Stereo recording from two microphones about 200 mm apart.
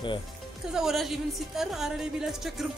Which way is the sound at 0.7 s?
Centre (ahead or behind).